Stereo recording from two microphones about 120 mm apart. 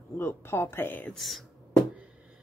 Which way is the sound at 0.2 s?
20° left (ahead or behind).